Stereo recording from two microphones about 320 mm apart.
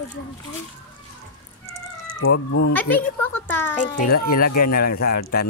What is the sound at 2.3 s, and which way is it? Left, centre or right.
Speech, left.